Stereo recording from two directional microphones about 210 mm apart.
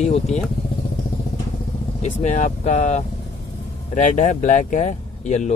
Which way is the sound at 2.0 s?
30° left (ahead or behind).